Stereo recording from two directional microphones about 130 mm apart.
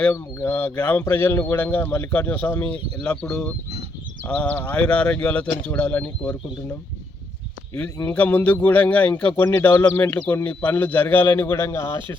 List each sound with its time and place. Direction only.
0.3 s speech: 15° left (ahead or behind)
8.1 s speech: 15° left (ahead or behind)